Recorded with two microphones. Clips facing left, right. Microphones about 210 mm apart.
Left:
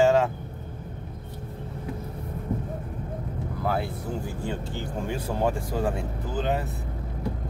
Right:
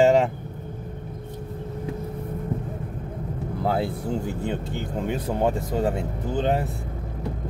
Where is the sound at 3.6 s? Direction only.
30° right (ahead or behind).